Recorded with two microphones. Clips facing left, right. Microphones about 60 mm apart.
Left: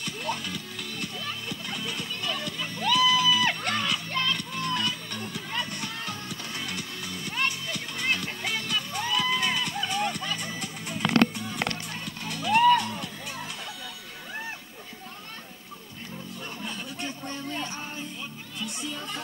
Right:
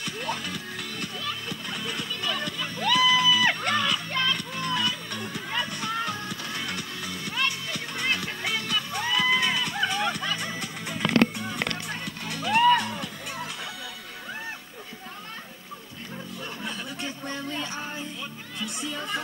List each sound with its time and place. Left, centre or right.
0.0 s music: right
4.4 s music: right
9.8 s music: right
11.3 s a sound: right
11.7 s music: right
18.6 s music: right